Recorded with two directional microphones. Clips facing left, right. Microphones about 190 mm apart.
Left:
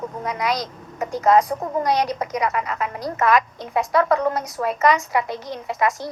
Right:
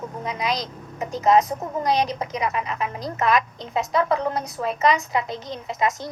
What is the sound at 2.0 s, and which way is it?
A woman's voice, 20° right (ahead or behind).